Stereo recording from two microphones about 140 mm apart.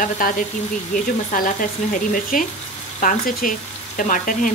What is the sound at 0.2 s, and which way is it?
Speech, 80° left.